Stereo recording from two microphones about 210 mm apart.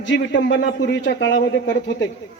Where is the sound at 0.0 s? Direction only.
60° left (ahead or behind).